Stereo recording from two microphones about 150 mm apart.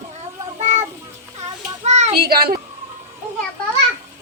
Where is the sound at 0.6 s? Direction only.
50° right (ahead or behind).